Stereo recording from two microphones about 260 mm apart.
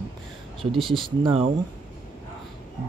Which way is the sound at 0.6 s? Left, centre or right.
Centre.